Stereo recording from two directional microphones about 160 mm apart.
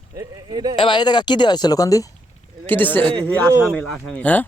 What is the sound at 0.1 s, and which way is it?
Speech, 20° right (ahead or behind).